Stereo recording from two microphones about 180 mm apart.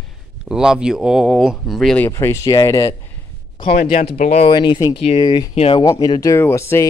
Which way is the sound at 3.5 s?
35° left (ahead or behind).